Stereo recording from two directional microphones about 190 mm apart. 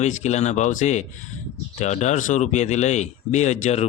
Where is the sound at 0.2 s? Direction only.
35° left (ahead or behind).